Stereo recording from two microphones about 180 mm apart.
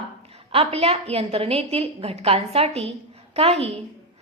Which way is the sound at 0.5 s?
35° right (ahead or behind).